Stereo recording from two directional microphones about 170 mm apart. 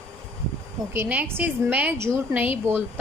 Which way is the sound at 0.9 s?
10° right (ahead or behind).